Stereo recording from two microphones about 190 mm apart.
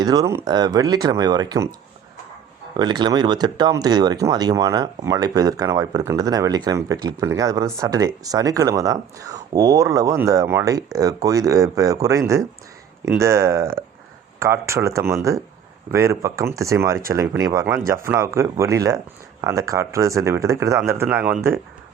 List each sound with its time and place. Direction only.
0.0 s speech: 20° right (ahead or behind)
2.7 s speech: 20° right (ahead or behind)